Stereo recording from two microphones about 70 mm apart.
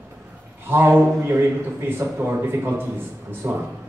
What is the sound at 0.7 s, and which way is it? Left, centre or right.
A man's voice, right.